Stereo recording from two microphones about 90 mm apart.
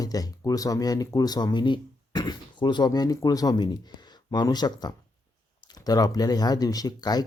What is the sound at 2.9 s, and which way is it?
Speech, 40° left (ahead or behind).